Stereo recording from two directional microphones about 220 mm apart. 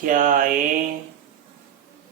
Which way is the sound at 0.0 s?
35° right (ahead or behind).